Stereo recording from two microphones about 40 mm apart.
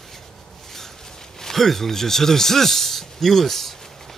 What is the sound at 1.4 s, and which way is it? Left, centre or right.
A man's voice, centre.